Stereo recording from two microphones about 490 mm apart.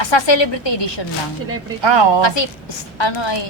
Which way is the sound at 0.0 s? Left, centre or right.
Left.